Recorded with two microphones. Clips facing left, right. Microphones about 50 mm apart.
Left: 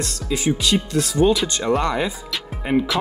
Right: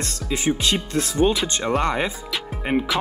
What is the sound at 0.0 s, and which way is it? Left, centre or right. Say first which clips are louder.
Speech: left 1 dB; right.